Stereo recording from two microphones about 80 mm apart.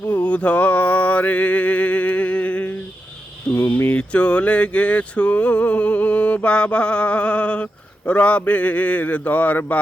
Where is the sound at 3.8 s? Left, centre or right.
Centre.